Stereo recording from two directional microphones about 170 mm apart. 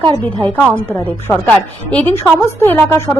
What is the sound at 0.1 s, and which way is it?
Speech, 25° right (ahead or behind).